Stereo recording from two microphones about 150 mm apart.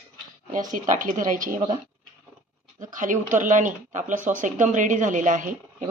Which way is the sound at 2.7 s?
60° right (ahead or behind).